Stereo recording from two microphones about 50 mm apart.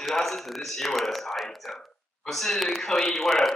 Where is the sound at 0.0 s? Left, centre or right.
Centre.